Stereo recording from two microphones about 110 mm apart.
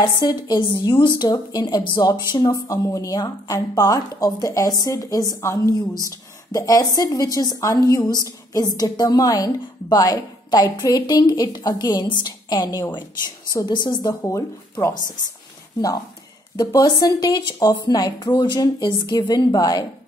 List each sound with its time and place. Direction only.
0.0 s a woman's voice: 40° left (ahead or behind)
16.5 s a woman's voice: 35° left (ahead or behind)